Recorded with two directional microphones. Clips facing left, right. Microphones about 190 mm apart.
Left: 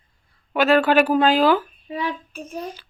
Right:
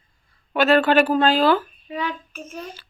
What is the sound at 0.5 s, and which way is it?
Speech, 10° left (ahead or behind).